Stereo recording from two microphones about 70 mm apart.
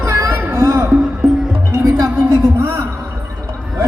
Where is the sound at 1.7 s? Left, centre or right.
Right.